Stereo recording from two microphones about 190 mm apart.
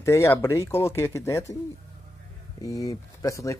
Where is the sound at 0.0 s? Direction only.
15° left (ahead or behind).